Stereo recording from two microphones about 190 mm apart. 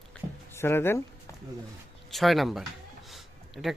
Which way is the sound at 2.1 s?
Centre (ahead or behind).